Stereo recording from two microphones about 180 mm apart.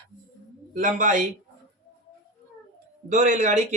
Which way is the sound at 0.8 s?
45° right (ahead or behind).